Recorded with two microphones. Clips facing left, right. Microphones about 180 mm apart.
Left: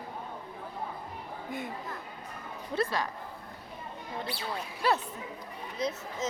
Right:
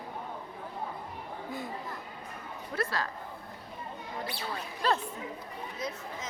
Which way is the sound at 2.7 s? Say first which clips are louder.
Left 3 dB; 20° left (ahead or behind).